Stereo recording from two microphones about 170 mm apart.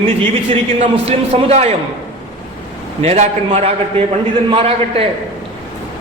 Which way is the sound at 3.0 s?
40° right (ahead or behind).